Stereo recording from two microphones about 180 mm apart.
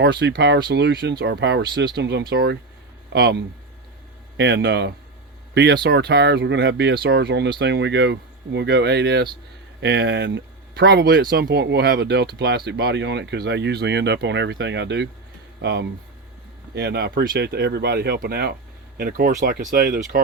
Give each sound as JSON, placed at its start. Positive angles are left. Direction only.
{"t": 0.0, "sound": "speech", "side_deg": -65}
{"t": 4.4, "sound": "speech", "side_deg": -90}
{"t": 5.5, "sound": "speech", "side_deg": -60}